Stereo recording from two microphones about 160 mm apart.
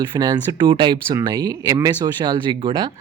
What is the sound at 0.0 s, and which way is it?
Speech, 25° right (ahead or behind).